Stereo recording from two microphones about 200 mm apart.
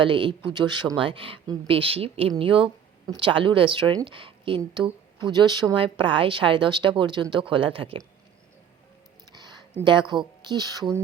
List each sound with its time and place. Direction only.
0.0 s a woman's voice: 25° right (ahead or behind)
9.3 s a sound: 20° right (ahead or behind)
9.8 s a woman's voice: 25° right (ahead or behind)